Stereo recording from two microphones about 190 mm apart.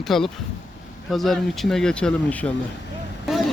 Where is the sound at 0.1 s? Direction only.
Centre (ahead or behind).